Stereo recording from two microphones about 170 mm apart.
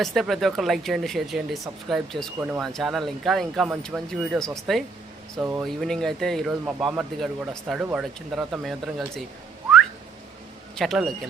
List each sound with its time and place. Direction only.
0.0 s speech: centre (ahead or behind)
5.4 s speech: 15° right (ahead or behind)
5.6 s speech: centre (ahead or behind)
10.8 s speech: centre (ahead or behind)